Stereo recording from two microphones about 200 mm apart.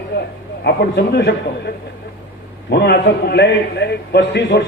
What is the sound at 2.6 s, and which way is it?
A man's voice, 55° left (ahead or behind).